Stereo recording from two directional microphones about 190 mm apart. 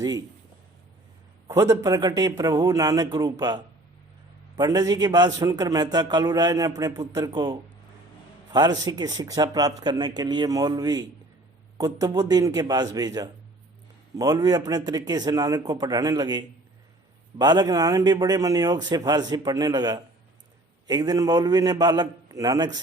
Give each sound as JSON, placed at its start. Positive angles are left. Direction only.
{"t": 1.5, "sound": "a man's voice", "side_deg": -15}